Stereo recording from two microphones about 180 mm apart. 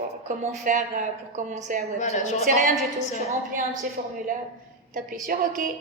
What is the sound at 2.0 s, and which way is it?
Speech, 40° left (ahead or behind).